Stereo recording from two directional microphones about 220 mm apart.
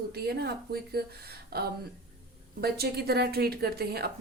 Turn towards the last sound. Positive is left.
turn(degrees=-45)  # may be behind; listen again after turning